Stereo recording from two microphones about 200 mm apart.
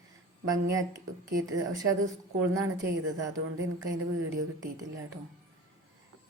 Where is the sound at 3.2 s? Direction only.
15° right (ahead or behind).